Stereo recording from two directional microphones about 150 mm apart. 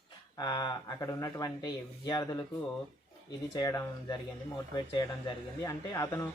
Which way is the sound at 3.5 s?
25° left (ahead or behind).